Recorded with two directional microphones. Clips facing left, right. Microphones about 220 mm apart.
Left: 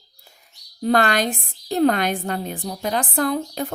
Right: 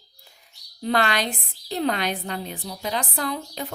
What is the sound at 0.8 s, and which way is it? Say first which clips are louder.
A woman's voice: left 5 dB; 45° left (ahead or behind).